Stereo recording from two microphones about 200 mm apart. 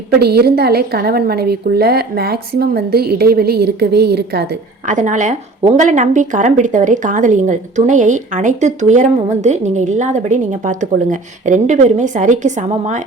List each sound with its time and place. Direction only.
0.2 s a woman's voice: 50° right (ahead or behind)
4.9 s speech: 40° right (ahead or behind)